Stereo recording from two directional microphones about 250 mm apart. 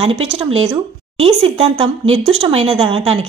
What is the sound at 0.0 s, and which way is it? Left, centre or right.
Speech, right.